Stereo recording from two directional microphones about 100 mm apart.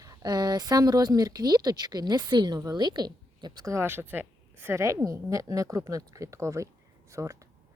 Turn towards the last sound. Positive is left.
turn(degrees=-30)  # may be behind; listen again after turning